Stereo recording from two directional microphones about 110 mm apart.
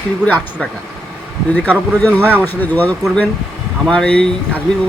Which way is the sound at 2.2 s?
15° right (ahead or behind).